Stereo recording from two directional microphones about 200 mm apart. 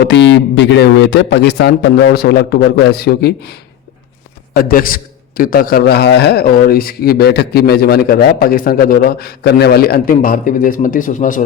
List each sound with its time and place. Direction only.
0.0 s a man's voice: 60° left (ahead or behind); by 11.4 s 40° left (ahead or behind)